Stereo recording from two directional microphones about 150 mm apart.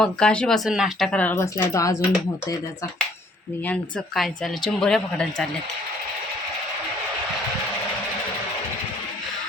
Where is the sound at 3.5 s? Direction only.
10° left (ahead or behind).